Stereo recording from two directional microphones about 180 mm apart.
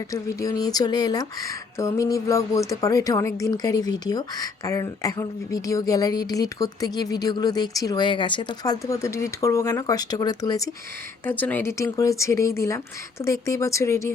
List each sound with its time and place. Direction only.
0.1 s speech: 20° left (ahead or behind)
11.3 s speech: 10° left (ahead or behind)